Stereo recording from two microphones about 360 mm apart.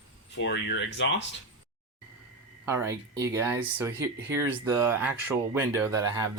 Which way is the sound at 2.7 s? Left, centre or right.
Centre.